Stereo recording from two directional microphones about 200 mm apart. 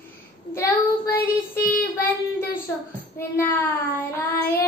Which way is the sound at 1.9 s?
10° left (ahead or behind).